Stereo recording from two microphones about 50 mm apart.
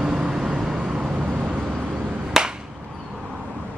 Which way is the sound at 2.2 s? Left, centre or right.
Centre.